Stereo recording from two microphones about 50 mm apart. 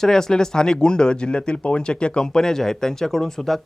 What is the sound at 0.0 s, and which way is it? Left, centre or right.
Speech, centre.